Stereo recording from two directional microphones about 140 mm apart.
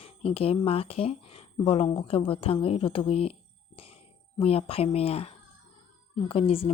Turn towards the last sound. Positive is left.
turn(degrees=45)  # may be behind; listen again after turning